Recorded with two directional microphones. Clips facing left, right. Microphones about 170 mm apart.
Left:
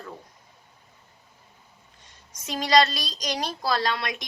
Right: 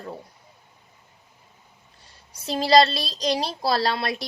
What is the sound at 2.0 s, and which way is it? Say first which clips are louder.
A woman's voice: right 5 dB; 35° right (ahead or behind).